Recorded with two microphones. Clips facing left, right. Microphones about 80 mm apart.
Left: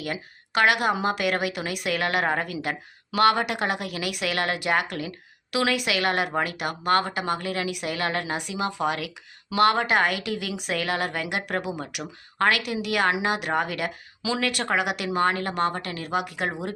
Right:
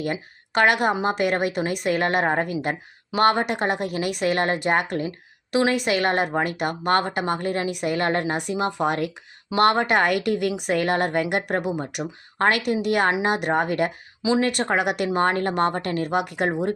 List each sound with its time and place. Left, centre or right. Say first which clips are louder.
0.0 s a woman's voice: right 4 dB; right
14.2 s speech: right 6 dB; right
14.6 s a woman's voice: right 3 dB; right